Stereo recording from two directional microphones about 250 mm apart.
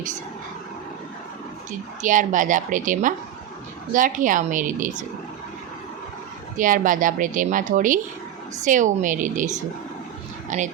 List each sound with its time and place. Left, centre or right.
2.0 s speech: right
6.6 s a woman's voice: right